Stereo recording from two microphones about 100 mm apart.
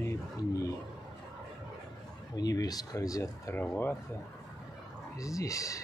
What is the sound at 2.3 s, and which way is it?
Speech, 40° left (ahead or behind).